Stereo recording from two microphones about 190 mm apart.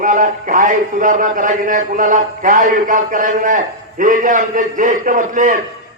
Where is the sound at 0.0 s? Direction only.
45° right (ahead or behind).